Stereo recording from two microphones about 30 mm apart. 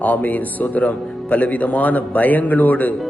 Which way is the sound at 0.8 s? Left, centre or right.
Left.